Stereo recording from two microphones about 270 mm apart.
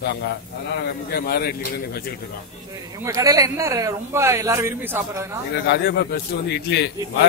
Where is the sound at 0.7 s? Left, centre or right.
Left.